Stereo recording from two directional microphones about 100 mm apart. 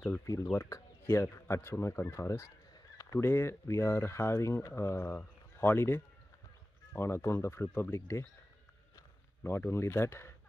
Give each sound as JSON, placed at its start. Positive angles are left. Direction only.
{"t": 0.3, "sound": "speech", "side_deg": 30}
{"t": 3.0, "sound": "a sound", "side_deg": 35}
{"t": 3.3, "sound": "speech", "side_deg": 25}
{"t": 9.4, "sound": "speech", "side_deg": 25}